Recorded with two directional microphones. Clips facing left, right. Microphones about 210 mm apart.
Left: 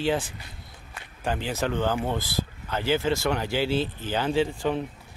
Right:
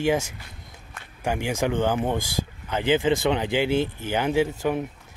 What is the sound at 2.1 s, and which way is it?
Speech, 45° right (ahead or behind).